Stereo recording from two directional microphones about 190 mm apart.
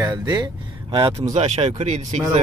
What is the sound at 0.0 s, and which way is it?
Speech, 20° right (ahead or behind).